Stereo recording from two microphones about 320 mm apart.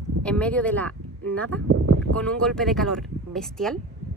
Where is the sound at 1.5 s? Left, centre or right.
Right.